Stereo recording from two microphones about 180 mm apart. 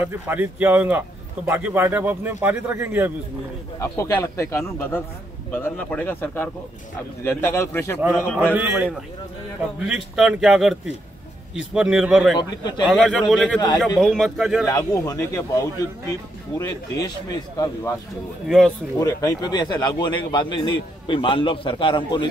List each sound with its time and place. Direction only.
0.0 s a man's voice: 10° right (ahead or behind)
3.8 s a man's voice: 15° left (ahead or behind)
8.5 s a man's voice: 10° right (ahead or behind)
12.4 s a man's voice: 25° left (ahead or behind)
12.8 s speech: centre (ahead or behind)
14.7 s a man's voice: 20° left (ahead or behind)
18.9 s a man's voice: 20° left (ahead or behind)